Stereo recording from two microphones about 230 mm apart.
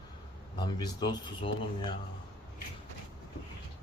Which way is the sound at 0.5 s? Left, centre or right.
Centre.